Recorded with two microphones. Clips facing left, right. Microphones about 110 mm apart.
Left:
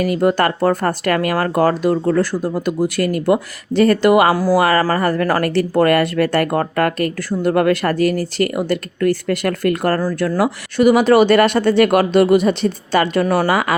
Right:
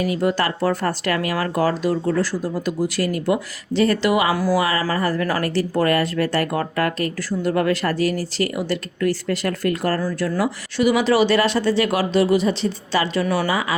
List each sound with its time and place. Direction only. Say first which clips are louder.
0.0 s speech: left 5 dB; 50° left (ahead or behind)
4.4 s speech: left 4 dB; 40° left (ahead or behind)
4.6 s speech: left 6 dB; 50° left (ahead or behind)
13.5 s speech: left 5 dB; 65° left (ahead or behind)